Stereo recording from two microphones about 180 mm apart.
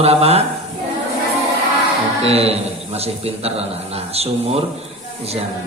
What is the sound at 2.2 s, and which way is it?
A man's voice, 35° right (ahead or behind).